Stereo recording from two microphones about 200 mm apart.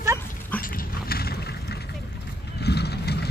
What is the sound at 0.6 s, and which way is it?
Dog, 45° left (ahead or behind).